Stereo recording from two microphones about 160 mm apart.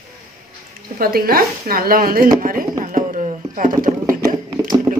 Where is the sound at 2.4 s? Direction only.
60° right (ahead or behind).